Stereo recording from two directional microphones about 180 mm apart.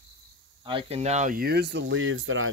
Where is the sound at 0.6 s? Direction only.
30° right (ahead or behind); by 2.4 s 90° right.